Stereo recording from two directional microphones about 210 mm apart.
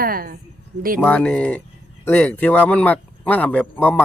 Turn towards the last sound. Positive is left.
turn(degrees=5)  # may be behind; listen again after turning